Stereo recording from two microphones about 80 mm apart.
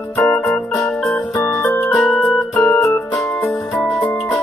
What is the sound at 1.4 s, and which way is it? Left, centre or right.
Keyboard, left.